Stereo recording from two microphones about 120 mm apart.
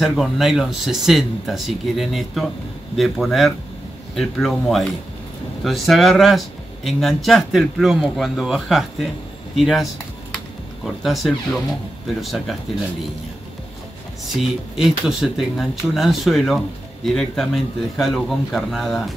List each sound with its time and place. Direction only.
0.0 s speech: centre (ahead or behind)
10.9 s speech: centre (ahead or behind)
14.8 s speech: 5° right (ahead or behind)